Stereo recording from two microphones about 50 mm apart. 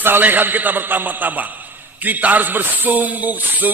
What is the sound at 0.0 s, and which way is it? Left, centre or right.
A man's voice, right.